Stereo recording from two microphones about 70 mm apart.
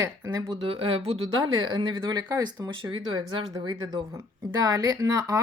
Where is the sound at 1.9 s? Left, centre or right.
Right.